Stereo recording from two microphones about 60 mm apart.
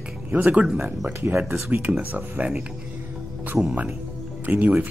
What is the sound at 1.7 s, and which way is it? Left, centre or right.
Speech, right.